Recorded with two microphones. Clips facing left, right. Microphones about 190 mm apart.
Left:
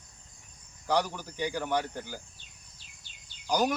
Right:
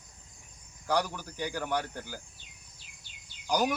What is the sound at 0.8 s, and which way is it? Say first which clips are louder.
Speech: left 1 dB; 10° right (ahead or behind).